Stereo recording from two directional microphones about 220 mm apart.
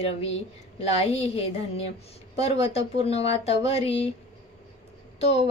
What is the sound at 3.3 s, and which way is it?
Speech, 30° left (ahead or behind).